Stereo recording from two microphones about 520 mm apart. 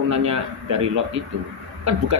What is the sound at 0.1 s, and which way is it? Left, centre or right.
Speech, right.